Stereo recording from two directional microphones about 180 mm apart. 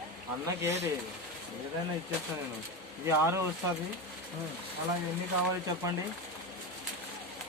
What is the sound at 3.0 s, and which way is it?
Speech, 15° right (ahead or behind).